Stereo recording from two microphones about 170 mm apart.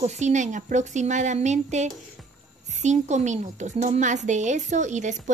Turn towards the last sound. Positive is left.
turn(degrees=-45)  # may be behind; listen again after turning